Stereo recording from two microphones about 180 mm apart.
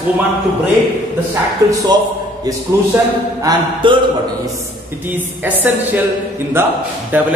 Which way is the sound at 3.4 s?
25° right (ahead or behind).